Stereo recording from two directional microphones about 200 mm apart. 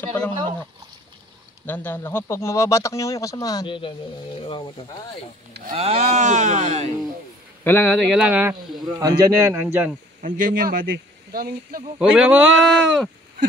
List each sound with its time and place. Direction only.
0.0 s speech: 5° left (ahead or behind)
1.7 s speech: 10° left (ahead or behind); by 4.6 s 25° left (ahead or behind)
5.8 s speech: 35° right (ahead or behind)
7.6 s speech: 10° left (ahead or behind)
8.2 s a man's voice: 10° right (ahead or behind)
10.2 s speech: 45° right (ahead or behind)
12.0 s speech: 5° right (ahead or behind)